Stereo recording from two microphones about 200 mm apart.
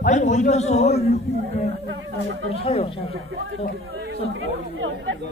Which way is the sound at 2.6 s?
30° left (ahead or behind).